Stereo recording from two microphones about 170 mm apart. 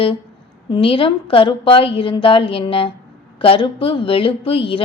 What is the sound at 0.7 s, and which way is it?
A woman's voice, 30° left (ahead or behind).